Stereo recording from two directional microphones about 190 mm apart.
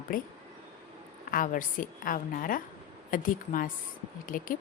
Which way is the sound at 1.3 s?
45° left (ahead or behind).